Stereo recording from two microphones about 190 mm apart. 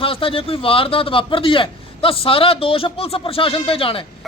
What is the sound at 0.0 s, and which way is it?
A man's voice, 30° left (ahead or behind).